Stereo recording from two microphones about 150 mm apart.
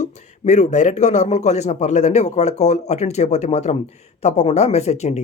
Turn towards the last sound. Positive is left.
turn(degrees=45)  # may be behind; listen again after turning